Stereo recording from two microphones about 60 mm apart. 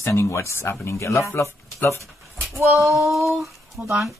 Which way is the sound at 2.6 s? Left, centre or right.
Right.